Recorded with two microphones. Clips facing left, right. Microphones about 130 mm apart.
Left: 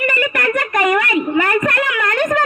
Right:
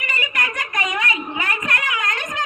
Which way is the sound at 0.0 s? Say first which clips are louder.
Left 8 dB; 55° left (ahead or behind).